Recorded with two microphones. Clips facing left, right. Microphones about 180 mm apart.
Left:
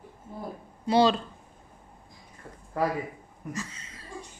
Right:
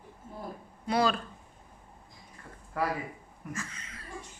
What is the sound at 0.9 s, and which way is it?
Speech, 25° left (ahead or behind).